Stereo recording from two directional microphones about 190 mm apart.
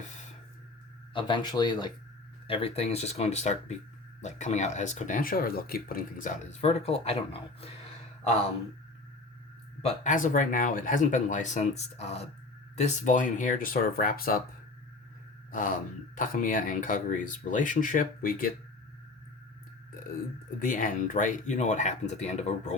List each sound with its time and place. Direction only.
1.1 s speech: 25° left (ahead or behind)
9.8 s speech: 40° left (ahead or behind)
15.5 s speech: 45° left (ahead or behind)
20.6 s speech: 45° left (ahead or behind)